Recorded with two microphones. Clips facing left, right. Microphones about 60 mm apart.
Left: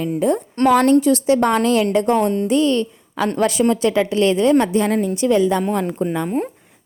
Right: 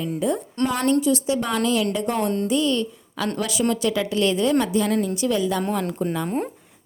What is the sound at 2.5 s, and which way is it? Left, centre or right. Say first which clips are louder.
A woman's voice: left 5 dB; left.